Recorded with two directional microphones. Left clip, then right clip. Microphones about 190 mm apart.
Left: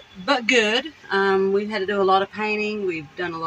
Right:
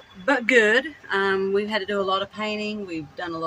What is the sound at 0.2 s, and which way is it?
Speech, 25° left (ahead or behind).